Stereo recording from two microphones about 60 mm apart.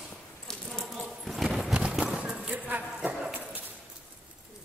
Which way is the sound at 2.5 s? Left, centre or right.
Right.